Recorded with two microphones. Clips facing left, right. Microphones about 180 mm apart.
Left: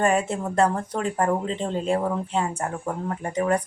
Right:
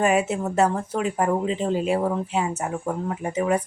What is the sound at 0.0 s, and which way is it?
Speech, 5° right (ahead or behind).